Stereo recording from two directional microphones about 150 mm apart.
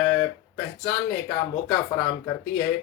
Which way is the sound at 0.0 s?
15° left (ahead or behind).